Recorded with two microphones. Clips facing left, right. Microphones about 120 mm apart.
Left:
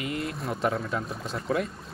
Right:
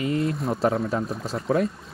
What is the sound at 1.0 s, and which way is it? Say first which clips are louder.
Speech: right 5 dB; centre (ahead or behind).